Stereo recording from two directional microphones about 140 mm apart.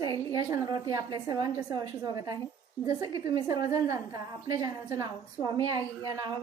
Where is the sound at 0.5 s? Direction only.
25° right (ahead or behind).